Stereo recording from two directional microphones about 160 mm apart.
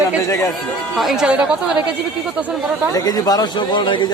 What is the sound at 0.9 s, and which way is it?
Speech, centre (ahead or behind).